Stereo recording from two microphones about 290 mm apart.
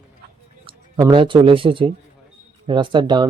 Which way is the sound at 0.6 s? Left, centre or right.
Centre.